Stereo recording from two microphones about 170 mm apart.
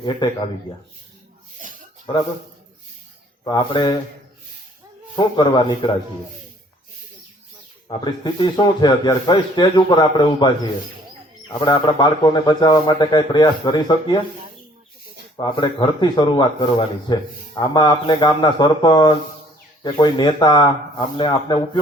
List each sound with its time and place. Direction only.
3.4 s speech: 25° left (ahead or behind)
5.1 s speech: 25° left (ahead or behind)
7.9 s speech: 25° left (ahead or behind)
11.6 s speech: 25° left (ahead or behind)
15.4 s speech: 25° left (ahead or behind)